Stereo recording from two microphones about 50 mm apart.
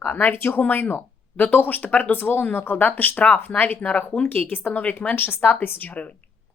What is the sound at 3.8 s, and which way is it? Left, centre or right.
Speech, left.